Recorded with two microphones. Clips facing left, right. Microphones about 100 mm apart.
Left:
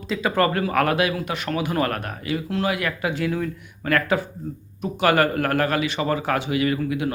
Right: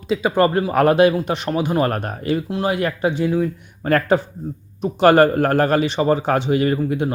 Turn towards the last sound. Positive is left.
turn(degrees=-40)  # may be behind; listen again after turning